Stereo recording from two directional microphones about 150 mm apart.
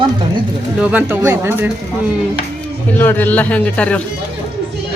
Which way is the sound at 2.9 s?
15° left (ahead or behind).